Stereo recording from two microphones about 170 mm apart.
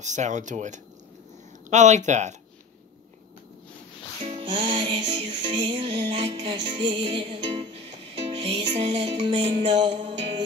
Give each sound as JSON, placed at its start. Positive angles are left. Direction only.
{"t": 0.0, "sound": "speech", "side_deg": -45}
{"t": 4.2, "sound": "music", "side_deg": -35}